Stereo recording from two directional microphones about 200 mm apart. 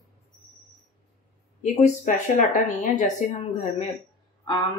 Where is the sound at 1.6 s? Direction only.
40° left (ahead or behind).